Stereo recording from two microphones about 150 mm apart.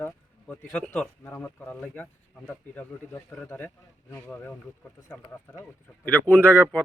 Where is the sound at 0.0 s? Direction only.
5° left (ahead or behind).